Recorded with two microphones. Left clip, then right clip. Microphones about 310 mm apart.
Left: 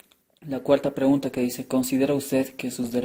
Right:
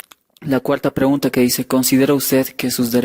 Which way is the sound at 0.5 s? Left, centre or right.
Right.